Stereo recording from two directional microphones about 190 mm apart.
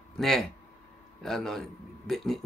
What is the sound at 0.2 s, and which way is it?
Speech, centre (ahead or behind).